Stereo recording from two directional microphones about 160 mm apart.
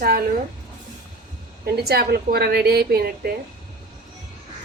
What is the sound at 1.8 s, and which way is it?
A woman's voice, 75° right (ahead or behind).